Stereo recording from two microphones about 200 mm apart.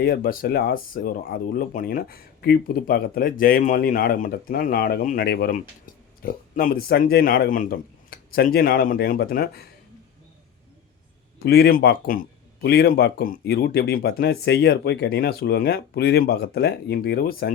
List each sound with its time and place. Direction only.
0.0 s speech: 50° left (ahead or behind)
11.4 s speech: 50° left (ahead or behind)